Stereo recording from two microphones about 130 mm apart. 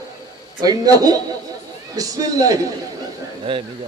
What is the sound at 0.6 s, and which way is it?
A man's voice, 30° right (ahead or behind).